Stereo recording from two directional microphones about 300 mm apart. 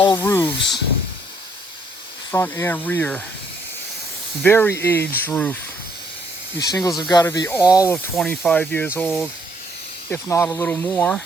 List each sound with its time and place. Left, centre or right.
0.0 s speech: centre
2.3 s speech: centre
4.4 s speech: centre
6.6 s speech: centre